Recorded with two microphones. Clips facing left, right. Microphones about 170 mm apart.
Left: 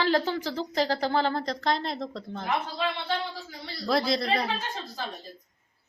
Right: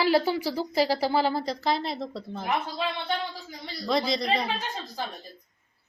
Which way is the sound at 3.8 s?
Centre (ahead or behind).